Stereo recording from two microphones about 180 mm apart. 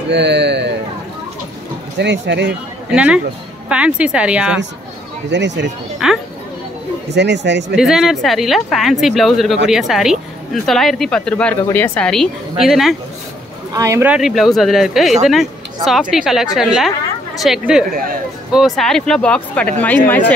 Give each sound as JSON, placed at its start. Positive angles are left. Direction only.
{"t": 0.1, "sound": "a sound", "side_deg": -70}
{"t": 2.0, "sound": "speech", "side_deg": -75}
{"t": 2.9, "sound": "speech", "side_deg": -5}
{"t": 5.3, "sound": "speech", "side_deg": -80}
{"t": 6.0, "sound": "speech", "side_deg": -5}
{"t": 7.2, "sound": "speech", "side_deg": -75}
{"t": 7.7, "sound": "speech", "side_deg": 0}
{"t": 13.7, "sound": "speech", "side_deg": -15}